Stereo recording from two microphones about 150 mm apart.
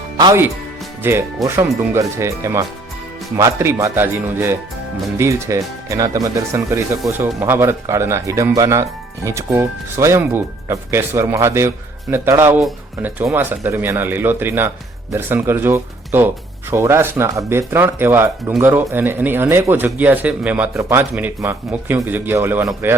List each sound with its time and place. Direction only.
1.0 s speech: 15° right (ahead or behind)